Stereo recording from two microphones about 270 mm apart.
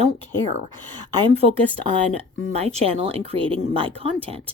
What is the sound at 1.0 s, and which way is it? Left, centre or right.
Speech, centre.